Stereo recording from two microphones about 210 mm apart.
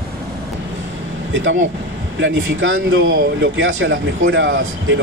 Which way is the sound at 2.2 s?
70° right (ahead or behind).